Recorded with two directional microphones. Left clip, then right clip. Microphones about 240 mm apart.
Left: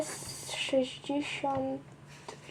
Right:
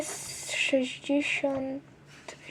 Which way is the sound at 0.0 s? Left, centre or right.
Right.